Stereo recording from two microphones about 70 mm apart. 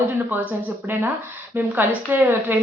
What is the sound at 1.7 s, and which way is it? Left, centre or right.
Speech, right.